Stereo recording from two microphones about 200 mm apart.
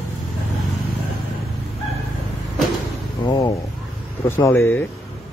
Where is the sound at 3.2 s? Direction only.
20° left (ahead or behind).